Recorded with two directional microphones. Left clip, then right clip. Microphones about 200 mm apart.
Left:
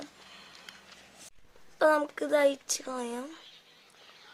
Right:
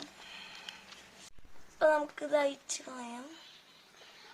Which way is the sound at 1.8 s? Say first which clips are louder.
Left 3 dB; 50° left (ahead or behind).